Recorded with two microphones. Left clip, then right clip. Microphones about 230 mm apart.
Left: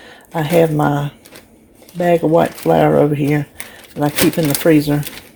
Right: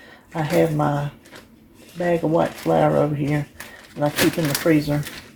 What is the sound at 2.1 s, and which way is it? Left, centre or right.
Speech, left.